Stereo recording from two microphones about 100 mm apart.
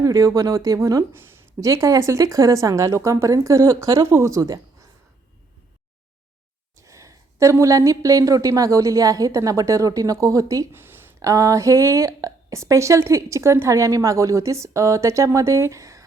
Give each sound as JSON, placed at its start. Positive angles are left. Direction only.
{"t": 0.0, "sound": "speech", "side_deg": -35}
{"t": 6.7, "sound": "speech", "side_deg": -35}
{"t": 10.7, "sound": "a sound", "side_deg": -20}
{"t": 11.3, "sound": "speech", "side_deg": -35}